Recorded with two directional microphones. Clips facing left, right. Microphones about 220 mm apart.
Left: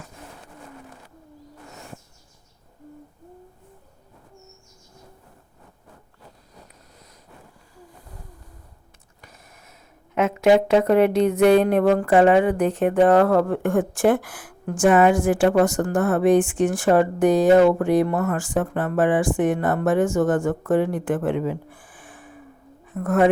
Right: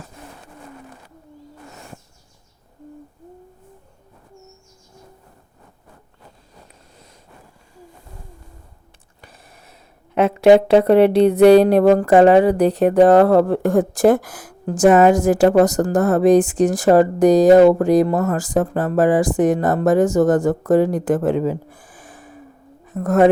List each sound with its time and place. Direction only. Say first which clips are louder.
10.2 s speech: right 5 dB; 35° right (ahead or behind)